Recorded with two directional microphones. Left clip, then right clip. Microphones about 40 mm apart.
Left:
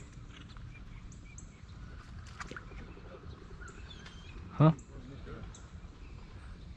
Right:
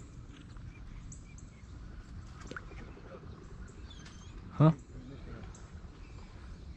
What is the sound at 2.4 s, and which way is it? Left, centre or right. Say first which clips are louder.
Bird: left 1 dB; right.